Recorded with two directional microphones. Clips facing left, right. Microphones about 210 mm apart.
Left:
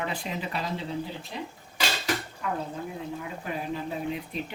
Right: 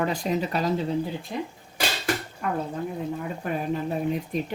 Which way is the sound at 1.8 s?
50° right (ahead or behind).